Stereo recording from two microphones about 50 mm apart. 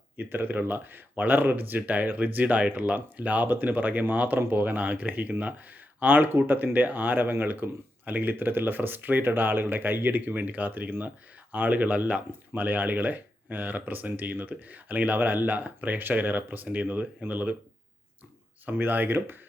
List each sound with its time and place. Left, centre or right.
0.2 s speech: right
12.3 s speech: right
18.6 s speech: right